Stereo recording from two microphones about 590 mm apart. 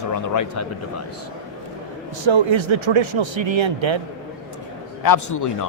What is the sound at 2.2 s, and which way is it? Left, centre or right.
Speech, right.